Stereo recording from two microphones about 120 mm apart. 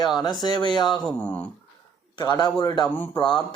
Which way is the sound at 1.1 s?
10° left (ahead or behind).